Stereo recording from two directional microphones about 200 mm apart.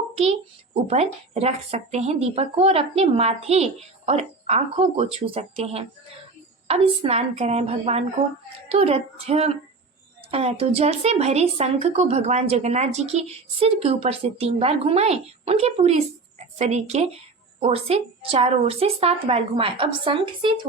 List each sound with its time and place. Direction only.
0.2 s a woman's voice: 35° right (ahead or behind)